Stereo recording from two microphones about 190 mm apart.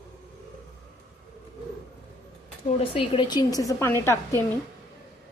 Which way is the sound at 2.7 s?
30° left (ahead or behind).